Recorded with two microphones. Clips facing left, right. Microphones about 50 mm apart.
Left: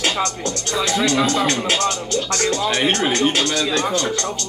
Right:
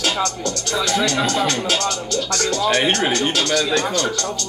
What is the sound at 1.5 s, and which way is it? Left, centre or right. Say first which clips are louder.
Speech: left 1 dB; left.